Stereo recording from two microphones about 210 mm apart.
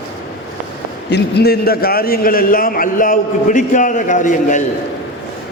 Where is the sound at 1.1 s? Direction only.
50° left (ahead or behind).